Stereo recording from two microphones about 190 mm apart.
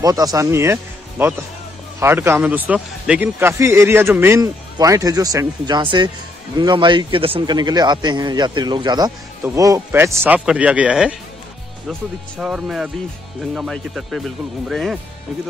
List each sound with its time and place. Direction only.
0.0 s a man's voice: 20° right (ahead or behind); by 15.0 s centre (ahead or behind)